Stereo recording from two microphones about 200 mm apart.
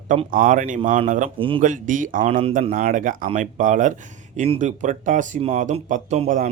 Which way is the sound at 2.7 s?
45° right (ahead or behind).